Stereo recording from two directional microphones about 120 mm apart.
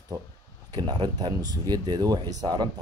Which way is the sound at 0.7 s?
35° right (ahead or behind).